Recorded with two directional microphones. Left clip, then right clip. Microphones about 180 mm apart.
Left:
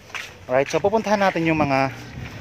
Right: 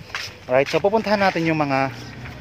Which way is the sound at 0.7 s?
10° left (ahead or behind).